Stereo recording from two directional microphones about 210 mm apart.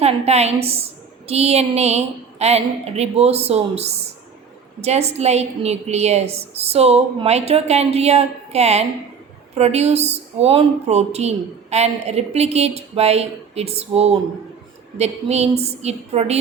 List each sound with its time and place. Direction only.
0.0 s a woman's voice: 30° right (ahead or behind)